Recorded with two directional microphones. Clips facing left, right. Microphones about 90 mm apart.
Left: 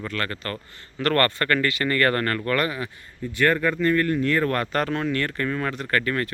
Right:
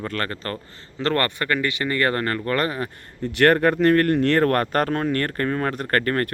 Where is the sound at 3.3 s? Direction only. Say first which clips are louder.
Right 4 dB; 75° right (ahead or behind).